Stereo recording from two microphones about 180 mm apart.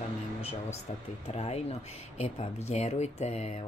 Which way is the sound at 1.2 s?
35° left (ahead or behind).